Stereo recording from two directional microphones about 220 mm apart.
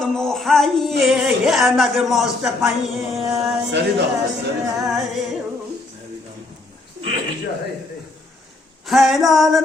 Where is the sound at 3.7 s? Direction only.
50° right (ahead or behind).